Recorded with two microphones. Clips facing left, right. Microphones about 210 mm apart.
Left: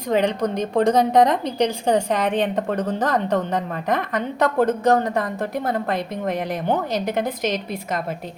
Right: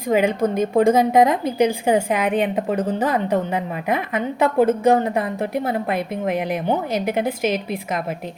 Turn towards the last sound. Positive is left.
turn(degrees=-10)  # may be behind; listen again after turning